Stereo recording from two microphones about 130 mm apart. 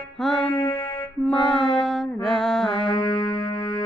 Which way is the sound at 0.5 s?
20° left (ahead or behind).